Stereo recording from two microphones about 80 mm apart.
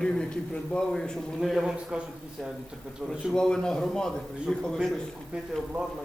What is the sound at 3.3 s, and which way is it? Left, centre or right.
A man's voice, centre.